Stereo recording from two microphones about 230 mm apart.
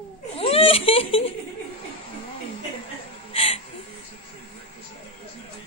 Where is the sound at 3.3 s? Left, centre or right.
Left.